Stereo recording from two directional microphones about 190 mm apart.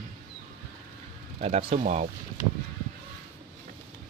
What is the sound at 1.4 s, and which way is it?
Speech, 30° right (ahead or behind).